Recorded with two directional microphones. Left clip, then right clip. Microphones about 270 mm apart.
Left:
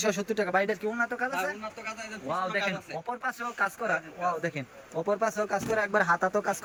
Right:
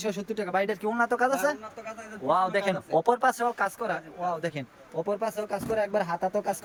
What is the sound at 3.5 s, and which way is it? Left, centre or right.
Speech, centre.